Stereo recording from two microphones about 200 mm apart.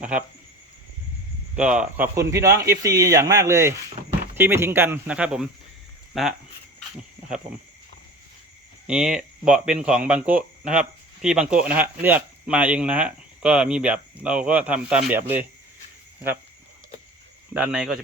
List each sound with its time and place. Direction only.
0.0 s speech: 5° right (ahead or behind)
1.5 s speech: 5° right (ahead or behind)
4.0 s a sound: 30° right (ahead or behind)
4.4 s speech: 10° right (ahead or behind)
8.9 s speech: 5° right (ahead or behind)
17.5 s speech: 5° right (ahead or behind)